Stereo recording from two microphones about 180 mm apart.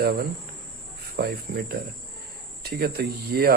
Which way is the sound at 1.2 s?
60° right (ahead or behind).